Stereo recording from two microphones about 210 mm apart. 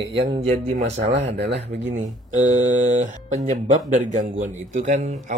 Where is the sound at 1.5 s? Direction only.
35° right (ahead or behind).